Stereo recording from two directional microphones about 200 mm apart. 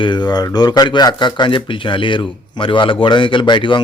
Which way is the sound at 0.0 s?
20° left (ahead or behind).